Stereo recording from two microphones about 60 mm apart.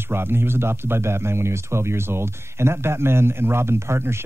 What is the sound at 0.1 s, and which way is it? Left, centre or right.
Speech, right.